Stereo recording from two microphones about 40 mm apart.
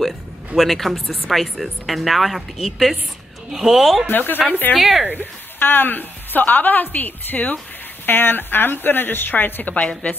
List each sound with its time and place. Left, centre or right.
0.6 s a woman's voice: centre
4.1 s a woman's voice: left
8.0 s a woman's voice: left
9.8 s speech: left